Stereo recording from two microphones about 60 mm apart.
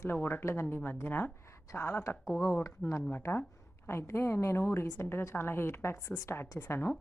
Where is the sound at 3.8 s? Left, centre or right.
Left.